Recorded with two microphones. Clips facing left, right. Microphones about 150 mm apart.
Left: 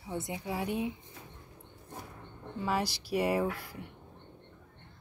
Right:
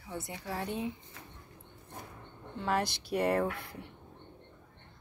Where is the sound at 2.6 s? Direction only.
5° left (ahead or behind).